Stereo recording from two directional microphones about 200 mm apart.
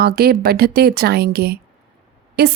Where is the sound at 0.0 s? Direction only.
50° right (ahead or behind).